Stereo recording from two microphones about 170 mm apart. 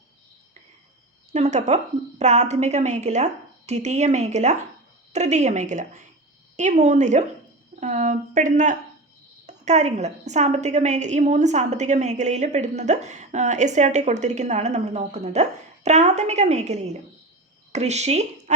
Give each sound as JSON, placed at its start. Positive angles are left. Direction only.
{"t": 1.3, "sound": "a woman's voice", "side_deg": -40}